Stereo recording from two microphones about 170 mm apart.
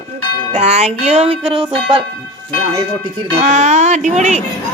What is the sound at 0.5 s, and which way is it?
Music, 40° right (ahead or behind).